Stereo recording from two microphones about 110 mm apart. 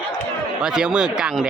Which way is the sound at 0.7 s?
5° right (ahead or behind).